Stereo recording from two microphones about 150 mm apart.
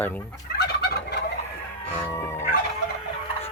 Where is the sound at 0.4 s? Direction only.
90° left.